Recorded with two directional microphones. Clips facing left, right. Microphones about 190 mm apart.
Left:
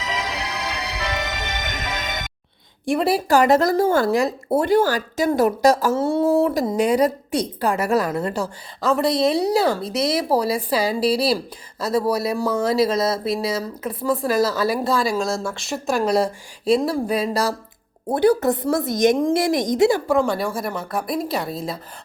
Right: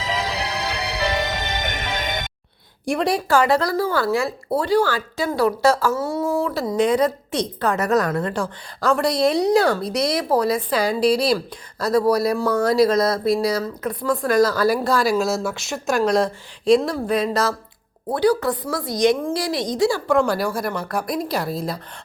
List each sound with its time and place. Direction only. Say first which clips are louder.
0.0 s music: right 2 dB; 30° right (ahead or behind)
2.8 s speech: left 1 dB; centre (ahead or behind)
3.6 s a woman's voice: left 4 dB; 45° left (ahead or behind)
4.0 s speech: left 2 dB; 20° left (ahead or behind)
4.6 s a woman's voice: left 1 dB; 45° left (ahead or behind)
5.9 s speech: left 4 dB; 25° left (ahead or behind)
6.5 s a woman's voice: even; 15° left (ahead or behind)
12.9 s speech: right 3 dB; 25° left (ahead or behind)
13.8 s speech: left 1 dB; 5° left (ahead or behind)
18.1 s a woman's voice: left 2 dB; 55° left (ahead or behind)
19.5 s a woman's voice: left 1 dB; 20° left (ahead or behind)
20.1 s speech: right 1 dB; centre (ahead or behind)